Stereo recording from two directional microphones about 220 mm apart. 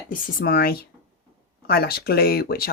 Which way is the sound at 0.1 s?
40° left (ahead or behind).